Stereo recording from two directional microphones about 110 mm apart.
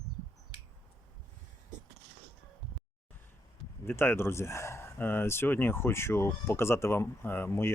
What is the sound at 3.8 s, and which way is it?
Speech, 20° left (ahead or behind).